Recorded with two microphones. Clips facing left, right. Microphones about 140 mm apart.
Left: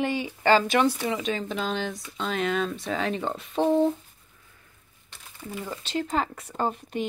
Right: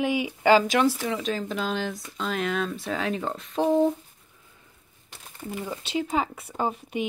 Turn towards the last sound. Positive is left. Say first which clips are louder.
# even
turn(degrees=-10)  # may be behind; listen again after turning